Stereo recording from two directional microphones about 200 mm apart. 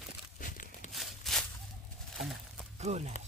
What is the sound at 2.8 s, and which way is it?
Speech, 35° right (ahead or behind).